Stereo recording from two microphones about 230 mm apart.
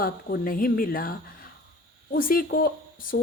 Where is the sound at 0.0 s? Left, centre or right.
Left.